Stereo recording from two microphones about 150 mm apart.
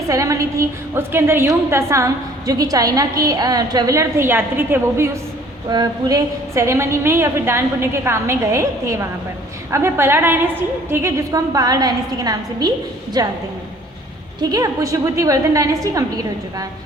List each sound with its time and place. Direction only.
0.1 s a woman's voice: 20° right (ahead or behind)
14.5 s a woman's voice: 20° right (ahead or behind)